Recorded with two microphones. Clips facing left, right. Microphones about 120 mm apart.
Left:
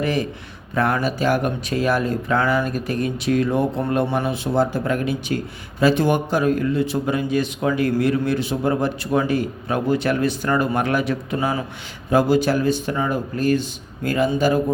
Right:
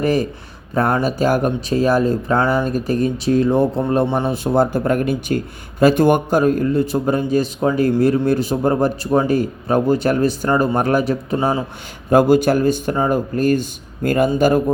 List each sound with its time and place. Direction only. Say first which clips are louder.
0.0 s a man's voice: right 4 dB; 40° right (ahead or behind); by 4.3 s 25° right (ahead or behind)
4.3 s a man's voice: right 4 dB; 45° right (ahead or behind); by 11.6 s 30° right (ahead or behind)
12.1 s speech: right 4 dB; 50° right (ahead or behind)